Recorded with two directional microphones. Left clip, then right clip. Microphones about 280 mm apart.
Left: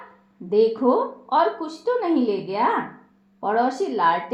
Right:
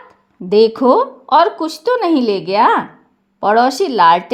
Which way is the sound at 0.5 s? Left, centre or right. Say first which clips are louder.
Right 8 dB; right.